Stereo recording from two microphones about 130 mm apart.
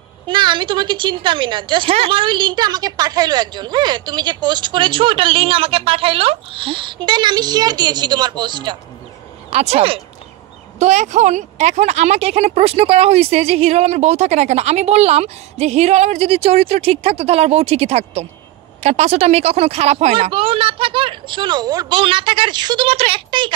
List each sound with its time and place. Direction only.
0.3 s a woman's voice: 35° right (ahead or behind)
9.5 s speech: 55° right (ahead or behind)
10.8 s speech: 60° right (ahead or behind); by 23.5 s 40° right (ahead or behind)